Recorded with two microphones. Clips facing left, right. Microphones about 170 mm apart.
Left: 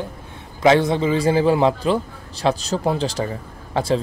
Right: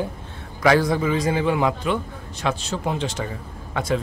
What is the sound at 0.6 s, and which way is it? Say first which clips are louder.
A man's voice: left 3 dB; 25° left (ahead or behind).